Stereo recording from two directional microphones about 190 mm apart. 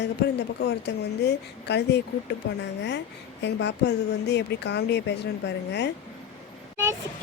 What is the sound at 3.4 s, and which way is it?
A woman's voice, 65° left (ahead or behind).